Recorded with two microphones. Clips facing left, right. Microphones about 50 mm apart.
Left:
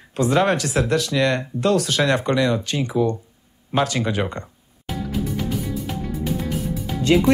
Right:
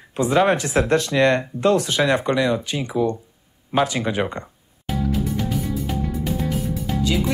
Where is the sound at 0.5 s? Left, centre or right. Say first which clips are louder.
Right 2 dB; right.